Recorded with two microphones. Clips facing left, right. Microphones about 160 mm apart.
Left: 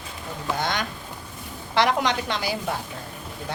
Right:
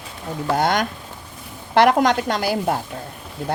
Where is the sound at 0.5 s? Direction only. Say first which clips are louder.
Right 8 dB; 50° right (ahead or behind).